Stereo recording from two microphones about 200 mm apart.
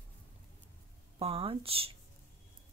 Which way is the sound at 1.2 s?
30° right (ahead or behind).